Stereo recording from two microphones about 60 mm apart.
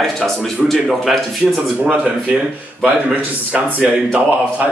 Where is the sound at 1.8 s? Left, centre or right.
Centre.